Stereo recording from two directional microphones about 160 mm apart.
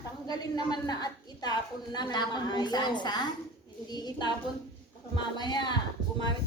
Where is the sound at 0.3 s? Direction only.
25° left (ahead or behind).